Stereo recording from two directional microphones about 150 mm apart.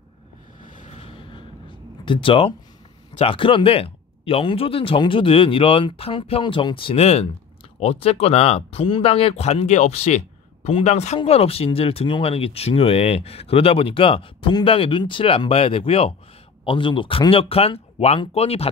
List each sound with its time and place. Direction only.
0.7 s vehicle: 55° left (ahead or behind)
0.9 s a sound: 35° left (ahead or behind)
2.0 s speech: 35° left (ahead or behind)